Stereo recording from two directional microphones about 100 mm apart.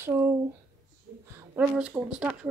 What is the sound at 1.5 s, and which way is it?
Speech, 15° right (ahead or behind).